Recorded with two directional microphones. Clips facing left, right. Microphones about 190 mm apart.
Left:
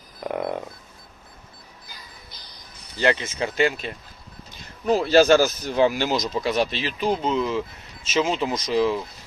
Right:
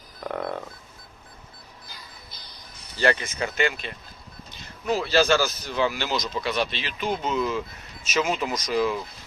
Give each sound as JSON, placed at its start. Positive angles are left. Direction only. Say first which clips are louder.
{"t": 0.3, "sound": "frog", "louder": "left 3 dB", "side_deg": 15}
{"t": 3.0, "sound": "speech", "louder": "left 1 dB", "side_deg": 20}
{"t": 4.9, "sound": "speech", "louder": "left 5 dB", "side_deg": 45}